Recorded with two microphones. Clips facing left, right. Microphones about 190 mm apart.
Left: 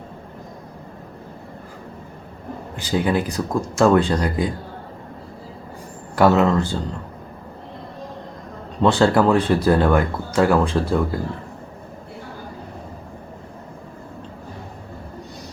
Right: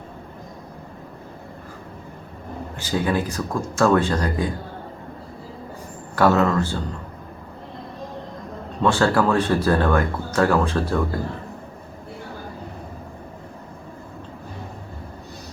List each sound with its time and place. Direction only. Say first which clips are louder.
2.7 s speech: left 2 dB; 15° left (ahead or behind)
6.1 s speech: left 2 dB; 15° left (ahead or behind)
8.8 s speech: left 3 dB; 20° left (ahead or behind)